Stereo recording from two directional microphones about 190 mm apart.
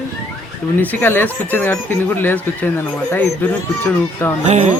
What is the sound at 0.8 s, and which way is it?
Speech, 10° left (ahead or behind).